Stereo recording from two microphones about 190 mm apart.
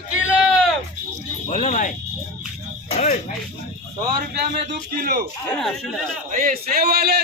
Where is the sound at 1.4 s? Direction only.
35° left (ahead or behind).